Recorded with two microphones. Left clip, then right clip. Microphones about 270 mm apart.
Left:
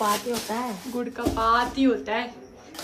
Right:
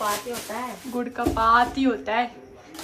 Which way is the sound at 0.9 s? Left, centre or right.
Centre.